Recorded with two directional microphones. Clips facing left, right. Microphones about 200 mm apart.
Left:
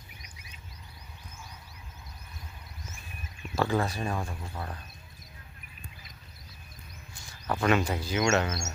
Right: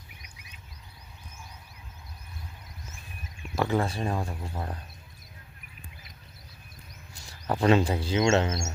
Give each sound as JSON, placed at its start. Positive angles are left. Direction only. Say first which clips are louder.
{"t": 3.5, "sound": "speech", "louder": "right 1 dB", "side_deg": -20}
{"t": 7.3, "sound": "speech", "louder": "right 4 dB", "side_deg": -35}